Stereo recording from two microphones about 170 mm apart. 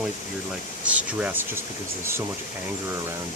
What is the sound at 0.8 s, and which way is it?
Speech, 10° right (ahead or behind).